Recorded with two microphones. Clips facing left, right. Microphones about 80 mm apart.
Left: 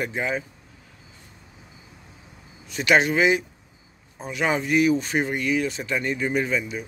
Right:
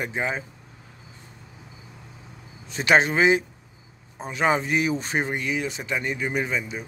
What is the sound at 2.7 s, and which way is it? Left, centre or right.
Speech, right.